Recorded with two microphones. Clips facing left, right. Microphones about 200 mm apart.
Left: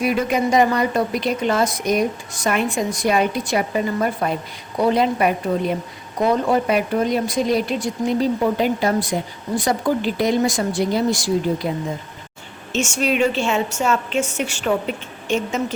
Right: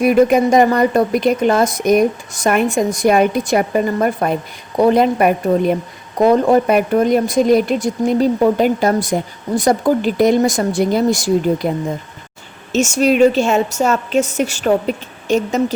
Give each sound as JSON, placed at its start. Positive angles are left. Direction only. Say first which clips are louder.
{"t": 0.0, "sound": "speech", "louder": "right 8 dB", "side_deg": -50}
{"t": 12.7, "sound": "a woman's voice", "louder": "right 7 dB", "side_deg": -40}